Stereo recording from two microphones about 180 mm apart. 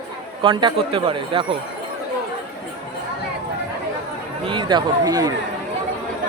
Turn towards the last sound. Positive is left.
turn(degrees=-20)  # may be behind; listen again after turning